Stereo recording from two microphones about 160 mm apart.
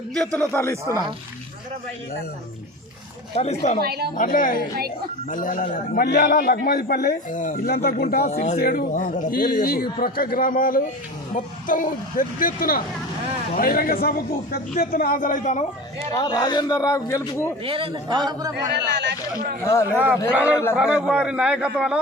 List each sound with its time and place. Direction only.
0.3 s speech: 15° left (ahead or behind)
3.3 s speech: 40° left (ahead or behind)
3.8 s a woman's voice: 80° right
4.1 s a man's voice: 60° left (ahead or behind)
7.3 s a man's voice: 50° left (ahead or behind); by 8.3 s 75° left (ahead or behind)
8.3 s speech: 45° left (ahead or behind)
8.5 s a man's voice: 70° left (ahead or behind)
9.6 s a man's voice: 70° left (ahead or behind); by 15.6 s 50° left (ahead or behind)
16.1 s a man's voice: 25° left (ahead or behind)
17.6 s a man's voice: 35° right (ahead or behind)
18.9 s speech: 90° right
19.6 s a man's voice: 20° left (ahead or behind)
20.3 s a man's voice: 10° right (ahead or behind)